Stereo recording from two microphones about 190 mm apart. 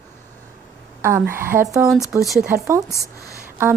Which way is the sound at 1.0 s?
15° right (ahead or behind).